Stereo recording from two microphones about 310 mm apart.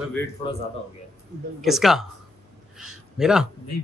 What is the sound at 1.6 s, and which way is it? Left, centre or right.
Speech, centre.